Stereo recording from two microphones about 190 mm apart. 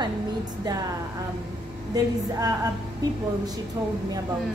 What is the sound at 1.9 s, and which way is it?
Speech, 20° right (ahead or behind).